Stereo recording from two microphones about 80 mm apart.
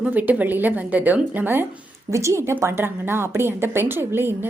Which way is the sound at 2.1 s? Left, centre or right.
Right.